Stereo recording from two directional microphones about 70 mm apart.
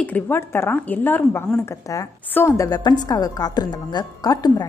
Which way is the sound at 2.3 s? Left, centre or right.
Left.